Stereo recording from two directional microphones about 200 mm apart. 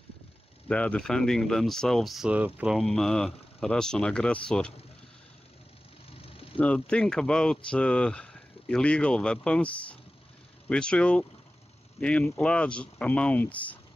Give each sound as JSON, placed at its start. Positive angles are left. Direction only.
{"t": 0.7, "sound": "speech", "side_deg": 5}
{"t": 6.1, "sound": "vehicle", "side_deg": 30}
{"t": 6.6, "sound": "speech", "side_deg": 5}